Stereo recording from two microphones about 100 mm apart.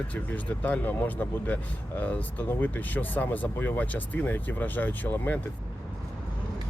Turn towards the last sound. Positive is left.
turn(degrees=15)  # may be behind; listen again after turning